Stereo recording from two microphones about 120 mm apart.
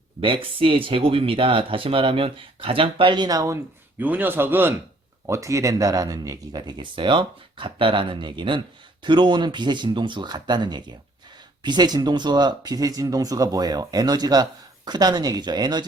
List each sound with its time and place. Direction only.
0.4 s speech: 45° right (ahead or behind); by 3.6 s 30° right (ahead or behind)
4.0 s a man's voice: 15° right (ahead or behind); by 15.8 s 35° right (ahead or behind)